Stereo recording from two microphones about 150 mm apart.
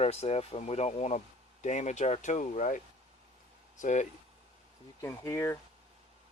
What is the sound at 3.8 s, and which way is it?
Speech, 50° left (ahead or behind).